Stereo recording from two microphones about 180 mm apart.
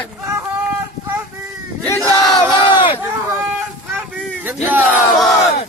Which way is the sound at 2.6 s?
30° left (ahead or behind).